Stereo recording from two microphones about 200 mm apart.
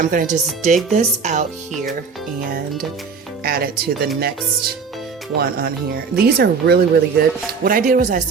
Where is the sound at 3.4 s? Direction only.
50° right (ahead or behind).